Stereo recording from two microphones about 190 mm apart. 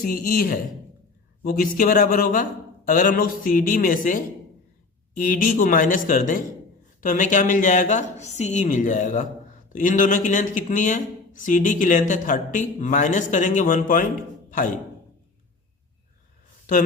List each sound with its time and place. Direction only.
0.0 s a man's voice: 50° left (ahead or behind)